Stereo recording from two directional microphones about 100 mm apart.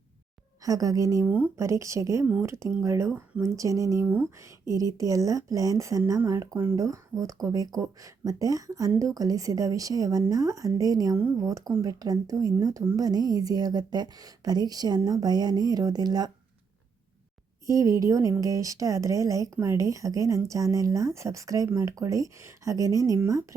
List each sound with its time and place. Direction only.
0.6 s a woman's voice: 35° right (ahead or behind)
4.0 s a woman's voice: 20° right (ahead or behind); by 16.3 s 40° right (ahead or behind)
17.7 s a woman's voice: 35° right (ahead or behind)